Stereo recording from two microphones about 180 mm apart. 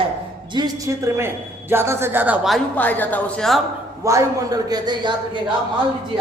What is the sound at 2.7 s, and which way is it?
Speech, 10° left (ahead or behind).